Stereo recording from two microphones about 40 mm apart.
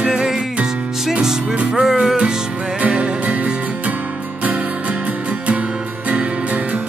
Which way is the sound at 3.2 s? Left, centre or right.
Right.